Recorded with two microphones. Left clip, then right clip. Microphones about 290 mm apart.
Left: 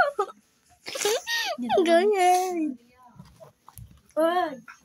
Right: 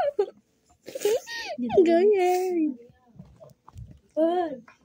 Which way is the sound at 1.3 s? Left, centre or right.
Centre.